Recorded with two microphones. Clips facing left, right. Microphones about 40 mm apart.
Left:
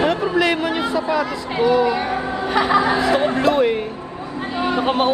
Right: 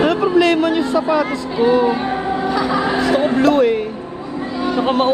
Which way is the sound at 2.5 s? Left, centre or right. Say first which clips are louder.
Left 4 dB; left.